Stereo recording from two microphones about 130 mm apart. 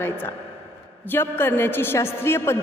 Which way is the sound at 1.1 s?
15° left (ahead or behind).